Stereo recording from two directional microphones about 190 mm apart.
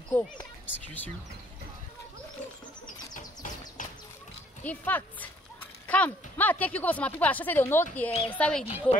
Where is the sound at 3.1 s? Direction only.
45° left (ahead or behind).